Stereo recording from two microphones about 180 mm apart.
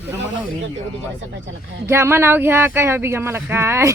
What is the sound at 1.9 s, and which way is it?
Speech, 15° right (ahead or behind).